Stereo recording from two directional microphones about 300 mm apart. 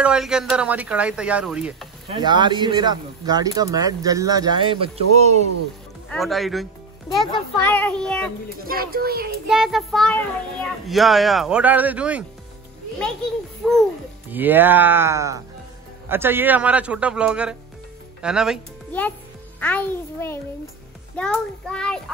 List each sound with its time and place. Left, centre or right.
0.0 s a child's voice: centre
2.2 s speech: centre
6.0 s a child's voice: centre
8.6 s a child's voice: right
9.5 s a child's voice: centre